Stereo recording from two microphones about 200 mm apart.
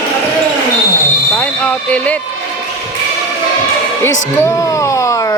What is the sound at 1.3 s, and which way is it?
Basketball bounce, 5° left (ahead or behind).